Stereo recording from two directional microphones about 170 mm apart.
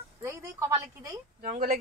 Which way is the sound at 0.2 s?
15° right (ahead or behind).